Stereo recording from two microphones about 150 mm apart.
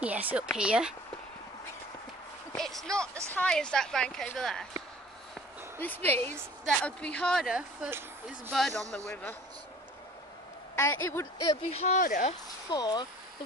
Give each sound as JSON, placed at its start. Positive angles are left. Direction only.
{"t": 0.0, "sound": "speech", "side_deg": -10}
{"t": 2.5, "sound": "speech", "side_deg": 0}
{"t": 5.8, "sound": "a man's voice", "side_deg": 10}
{"t": 10.8, "sound": "speech", "side_deg": 20}
{"t": 11.5, "sound": "speech", "side_deg": 40}
{"t": 12.0, "sound": "speech", "side_deg": 60}
{"t": 12.6, "sound": "speech", "side_deg": 30}